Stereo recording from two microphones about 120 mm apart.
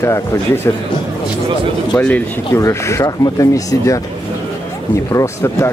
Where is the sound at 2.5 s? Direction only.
25° left (ahead or behind).